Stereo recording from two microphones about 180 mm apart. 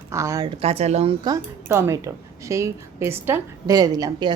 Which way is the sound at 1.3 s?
15° right (ahead or behind).